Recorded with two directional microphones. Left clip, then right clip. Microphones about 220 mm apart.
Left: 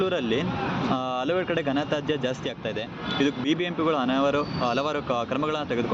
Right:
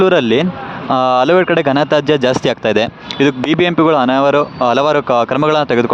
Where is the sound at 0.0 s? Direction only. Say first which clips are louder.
Right 14 dB; 45° right (ahead or behind).